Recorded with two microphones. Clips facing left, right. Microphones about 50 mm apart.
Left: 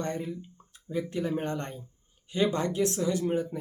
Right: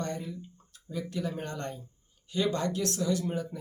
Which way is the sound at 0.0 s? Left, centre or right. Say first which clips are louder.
Left 3 dB; left.